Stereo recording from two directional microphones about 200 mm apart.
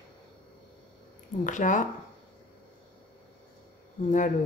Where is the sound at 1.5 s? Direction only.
40° left (ahead or behind).